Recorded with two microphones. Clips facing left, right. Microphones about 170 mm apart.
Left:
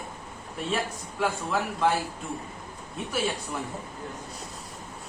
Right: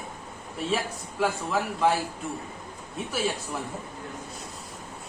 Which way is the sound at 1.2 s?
Centre (ahead or behind).